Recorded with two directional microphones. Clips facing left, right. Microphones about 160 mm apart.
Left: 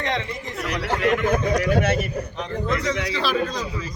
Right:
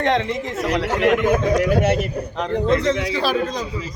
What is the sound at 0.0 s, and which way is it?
Speech, 55° right (ahead or behind).